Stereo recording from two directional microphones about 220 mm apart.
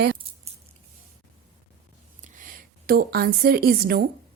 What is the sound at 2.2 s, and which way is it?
A woman's voice, 35° right (ahead or behind).